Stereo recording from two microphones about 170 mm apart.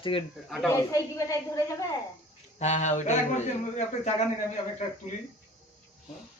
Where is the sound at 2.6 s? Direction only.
45° left (ahead or behind).